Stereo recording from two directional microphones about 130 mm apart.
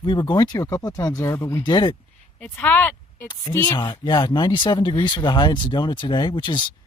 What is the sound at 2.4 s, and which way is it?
Speech, 15° left (ahead or behind).